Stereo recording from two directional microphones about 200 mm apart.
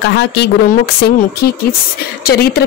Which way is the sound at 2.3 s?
55° left (ahead or behind).